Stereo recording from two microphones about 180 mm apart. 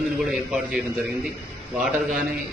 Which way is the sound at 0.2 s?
Centre (ahead or behind).